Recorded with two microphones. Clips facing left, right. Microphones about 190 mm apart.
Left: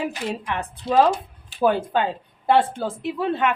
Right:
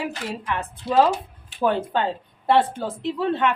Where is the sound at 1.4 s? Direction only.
10° left (ahead or behind).